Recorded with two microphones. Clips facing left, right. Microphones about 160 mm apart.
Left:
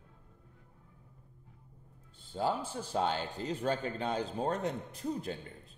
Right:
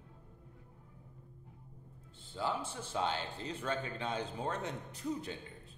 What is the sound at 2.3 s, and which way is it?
Speech, 45° left (ahead or behind).